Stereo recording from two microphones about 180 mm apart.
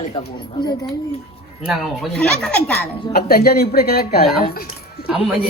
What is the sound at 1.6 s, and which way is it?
Speech, centre (ahead or behind).